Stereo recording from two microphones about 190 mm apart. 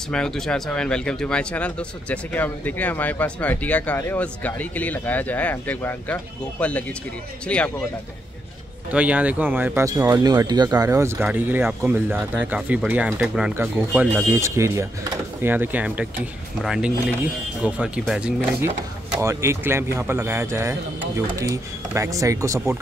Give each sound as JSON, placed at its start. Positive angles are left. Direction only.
{"t": 0.1, "sound": "speech", "side_deg": 5}
{"t": 8.9, "sound": "speech", "side_deg": -5}